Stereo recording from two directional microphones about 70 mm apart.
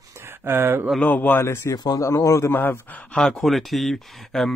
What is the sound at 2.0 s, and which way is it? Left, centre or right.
Speech, left.